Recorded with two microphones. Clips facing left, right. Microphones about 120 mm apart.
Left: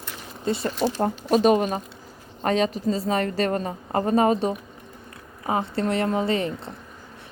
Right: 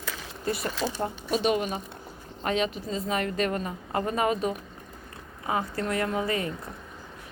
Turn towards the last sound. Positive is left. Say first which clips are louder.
# left 5 dB
turn(degrees=25)  # may be behind; listen again after turning